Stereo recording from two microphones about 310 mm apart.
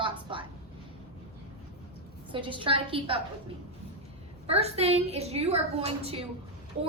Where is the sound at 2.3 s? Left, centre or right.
Centre.